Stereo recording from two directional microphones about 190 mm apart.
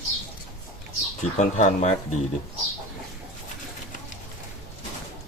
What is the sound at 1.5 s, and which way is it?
Speech, 40° left (ahead or behind).